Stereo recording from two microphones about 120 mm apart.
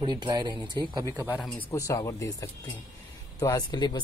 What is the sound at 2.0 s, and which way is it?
Speech, 30° left (ahead or behind).